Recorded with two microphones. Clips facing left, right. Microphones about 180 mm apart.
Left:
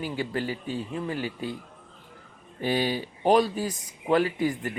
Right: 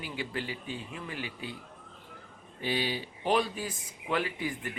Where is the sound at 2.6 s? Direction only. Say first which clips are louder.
Left 6 dB; 45° left (ahead or behind).